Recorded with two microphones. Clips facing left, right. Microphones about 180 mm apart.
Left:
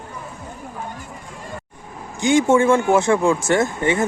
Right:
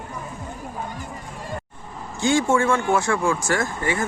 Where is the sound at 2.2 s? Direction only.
20° left (ahead or behind).